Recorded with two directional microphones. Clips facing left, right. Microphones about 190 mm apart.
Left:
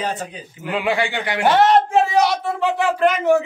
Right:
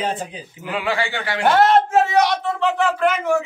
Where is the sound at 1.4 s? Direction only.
Centre (ahead or behind).